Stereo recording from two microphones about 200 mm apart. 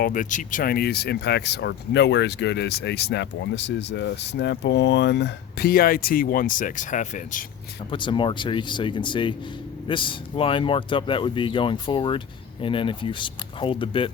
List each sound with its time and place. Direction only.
0.0 s speech: 40° left (ahead or behind)
7.9 s speech: 25° left (ahead or behind)